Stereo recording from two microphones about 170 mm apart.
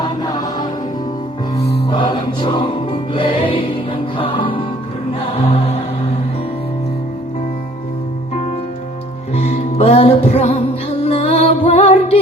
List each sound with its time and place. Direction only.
0.0 s music: 25° left (ahead or behind)
1.9 s music: 30° left (ahead or behind)
9.3 s music: 40° left (ahead or behind)